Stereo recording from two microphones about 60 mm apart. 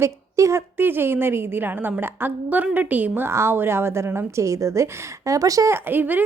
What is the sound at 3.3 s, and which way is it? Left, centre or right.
A woman's voice, right.